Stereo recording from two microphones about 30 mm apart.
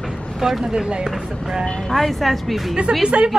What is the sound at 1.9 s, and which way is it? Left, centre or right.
Speech, centre.